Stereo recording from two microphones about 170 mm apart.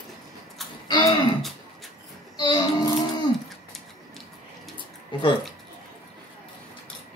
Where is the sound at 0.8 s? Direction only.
25° left (ahead or behind).